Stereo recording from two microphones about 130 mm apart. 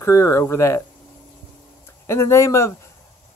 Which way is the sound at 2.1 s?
20° left (ahead or behind).